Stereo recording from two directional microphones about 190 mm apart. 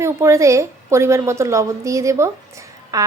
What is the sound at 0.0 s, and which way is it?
A woman's voice, 15° right (ahead or behind).